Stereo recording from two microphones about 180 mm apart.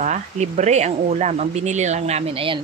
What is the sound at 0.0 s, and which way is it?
Chicken, 40° right (ahead or behind).